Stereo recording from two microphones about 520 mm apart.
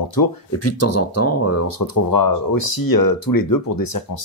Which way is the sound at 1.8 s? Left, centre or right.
Left.